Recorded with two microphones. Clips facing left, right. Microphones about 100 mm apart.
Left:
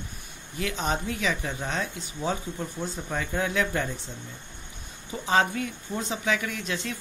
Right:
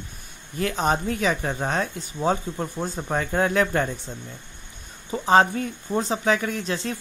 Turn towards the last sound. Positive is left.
turn(degrees=-35)  # may be behind; listen again after turning